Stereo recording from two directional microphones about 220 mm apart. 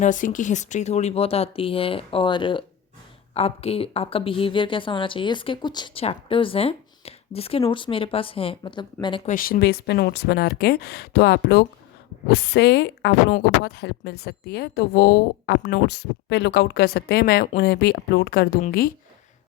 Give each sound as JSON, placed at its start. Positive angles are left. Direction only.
{"t": 0.0, "sound": "speech", "side_deg": 35}
{"t": 9.3, "sound": "speech", "side_deg": 40}